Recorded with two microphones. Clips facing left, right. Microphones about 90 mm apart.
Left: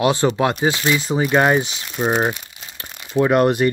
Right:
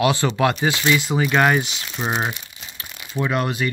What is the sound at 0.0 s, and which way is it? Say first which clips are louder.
Speech: left 2 dB; 35° left (ahead or behind).